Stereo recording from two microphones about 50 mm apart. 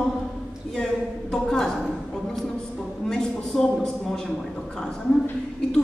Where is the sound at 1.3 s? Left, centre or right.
Centre.